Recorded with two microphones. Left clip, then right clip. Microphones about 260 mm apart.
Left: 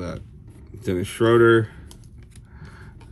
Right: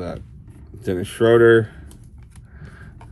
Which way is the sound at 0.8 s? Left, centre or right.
Centre.